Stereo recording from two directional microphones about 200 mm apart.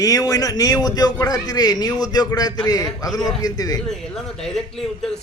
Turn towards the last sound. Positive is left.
turn(degrees=0)  # may be behind; listen again after turning